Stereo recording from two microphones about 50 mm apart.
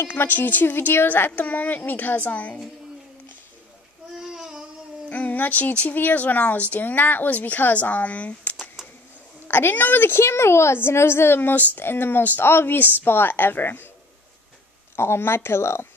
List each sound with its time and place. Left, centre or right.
0.1 s speech: left
4.2 s child singing: centre
5.1 s speech: left
9.5 s a woman's voice: left
15.0 s speech: left